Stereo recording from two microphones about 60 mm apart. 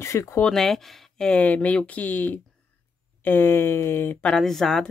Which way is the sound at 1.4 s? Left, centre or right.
Left.